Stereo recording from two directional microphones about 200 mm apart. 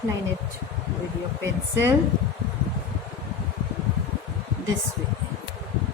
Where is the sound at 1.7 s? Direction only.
15° right (ahead or behind).